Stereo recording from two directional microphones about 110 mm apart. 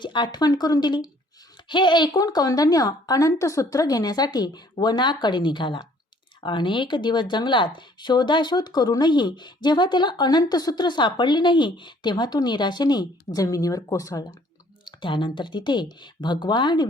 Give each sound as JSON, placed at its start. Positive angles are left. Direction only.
{"t": 0.0, "sound": "speech", "side_deg": 45}
{"t": 14.8, "sound": "speech", "side_deg": 45}